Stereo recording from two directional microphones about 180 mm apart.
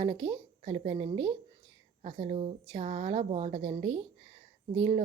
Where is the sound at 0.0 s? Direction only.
30° right (ahead or behind).